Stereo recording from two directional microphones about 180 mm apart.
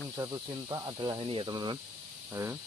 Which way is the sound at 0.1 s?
15° right (ahead or behind).